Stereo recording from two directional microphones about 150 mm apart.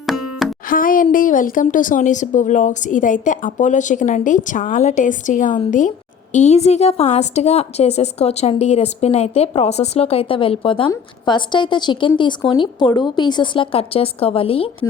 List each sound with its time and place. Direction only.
0.0 s music: centre (ahead or behind)
0.7 s a woman's voice: 65° left (ahead or behind); by 14.8 s 40° left (ahead or behind)